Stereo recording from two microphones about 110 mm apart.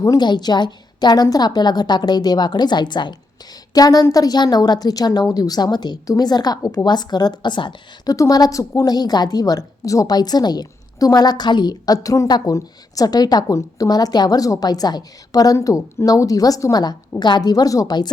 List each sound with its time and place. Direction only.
0.2 s a woman's voice: 40° left (ahead or behind)
8.1 s a woman's voice: 30° left (ahead or behind)